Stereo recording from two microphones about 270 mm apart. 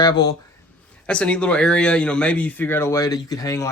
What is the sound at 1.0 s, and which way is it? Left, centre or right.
Speech, centre.